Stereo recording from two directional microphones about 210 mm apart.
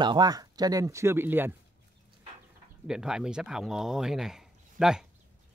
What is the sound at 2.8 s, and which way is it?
Speech, 5° right (ahead or behind).